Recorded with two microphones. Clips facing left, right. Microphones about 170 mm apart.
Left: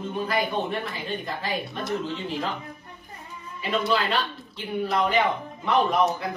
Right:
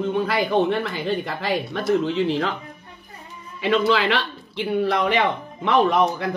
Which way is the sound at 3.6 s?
80° right.